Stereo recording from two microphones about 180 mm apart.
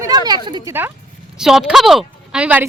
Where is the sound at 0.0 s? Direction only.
20° right (ahead or behind).